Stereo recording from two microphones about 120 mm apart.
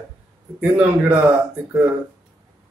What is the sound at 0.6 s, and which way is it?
Speech, 15° right (ahead or behind).